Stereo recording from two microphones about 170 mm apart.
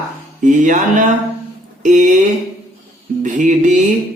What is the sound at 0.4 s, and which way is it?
Speech, 50° right (ahead or behind).